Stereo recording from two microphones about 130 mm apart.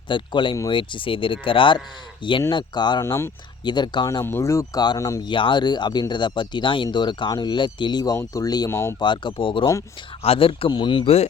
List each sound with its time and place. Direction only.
0.1 s speech: 40° left (ahead or behind)
3.0 s speech: 20° left (ahead or behind)
3.6 s speech: 35° left (ahead or behind)
4.0 s speech: 20° left (ahead or behind)
5.2 s speech: 40° left (ahead or behind); by 9.0 s 20° left (ahead or behind)
9.0 s speech: 35° left (ahead or behind)